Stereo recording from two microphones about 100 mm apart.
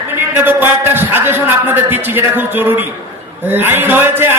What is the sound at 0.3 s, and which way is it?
A man's voice, 20° right (ahead or behind).